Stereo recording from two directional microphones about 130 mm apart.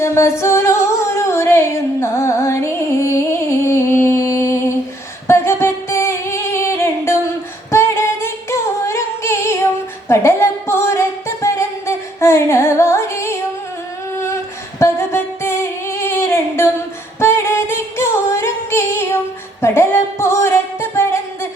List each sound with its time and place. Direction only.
0.0 s music: 20° left (ahead or behind)
7.7 s singing: 20° left (ahead or behind)
14.8 s a sound: 20° left (ahead or behind)
17.2 s singing: 20° left (ahead or behind)